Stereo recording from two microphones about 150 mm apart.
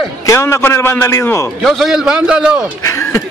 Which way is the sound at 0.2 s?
20° left (ahead or behind).